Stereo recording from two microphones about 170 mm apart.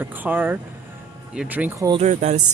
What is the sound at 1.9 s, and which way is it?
Speech, 45° right (ahead or behind).